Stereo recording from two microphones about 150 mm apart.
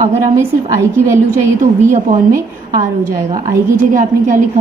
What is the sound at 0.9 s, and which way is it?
A woman's voice, 20° right (ahead or behind).